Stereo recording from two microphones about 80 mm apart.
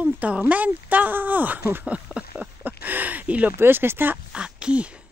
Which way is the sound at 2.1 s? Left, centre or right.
Centre.